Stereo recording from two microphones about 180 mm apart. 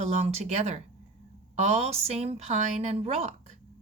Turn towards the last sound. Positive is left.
turn(degrees=-35)  # may be behind; listen again after turning